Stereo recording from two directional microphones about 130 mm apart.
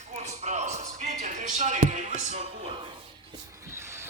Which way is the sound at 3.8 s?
20° right (ahead or behind).